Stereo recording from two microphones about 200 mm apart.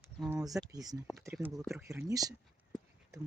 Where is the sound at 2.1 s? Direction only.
15° right (ahead or behind).